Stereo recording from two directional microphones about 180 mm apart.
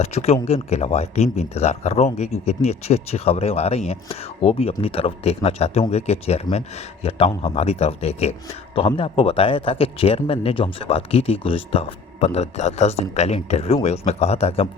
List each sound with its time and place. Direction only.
0.0 s a man's voice: 35° left (ahead or behind)